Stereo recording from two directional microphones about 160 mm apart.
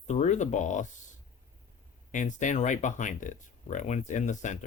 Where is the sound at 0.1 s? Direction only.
50° left (ahead or behind).